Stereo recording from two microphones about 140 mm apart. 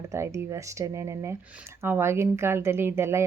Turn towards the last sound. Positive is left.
turn(degrees=-20)  # may be behind; listen again after turning